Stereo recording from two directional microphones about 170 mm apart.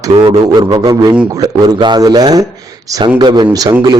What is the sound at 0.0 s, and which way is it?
A man's voice, 25° right (ahead or behind).